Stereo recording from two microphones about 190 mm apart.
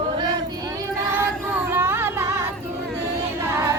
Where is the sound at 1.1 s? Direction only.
10° right (ahead or behind).